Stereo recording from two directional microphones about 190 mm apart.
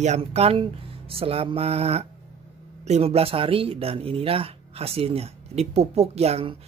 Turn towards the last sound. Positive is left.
turn(degrees=-35)  # may be behind; listen again after turning